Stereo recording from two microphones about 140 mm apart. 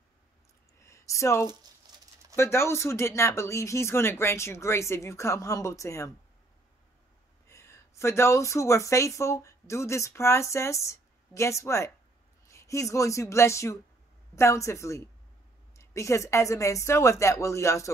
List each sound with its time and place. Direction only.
0.8 s speech: 20° left (ahead or behind)
1.9 s a sound: 30° right (ahead or behind)
2.3 s speech: 20° left (ahead or behind)
7.4 s speech: 20° left (ahead or behind)